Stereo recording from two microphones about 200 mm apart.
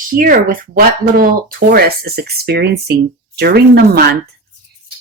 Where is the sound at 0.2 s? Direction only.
45° right (ahead or behind).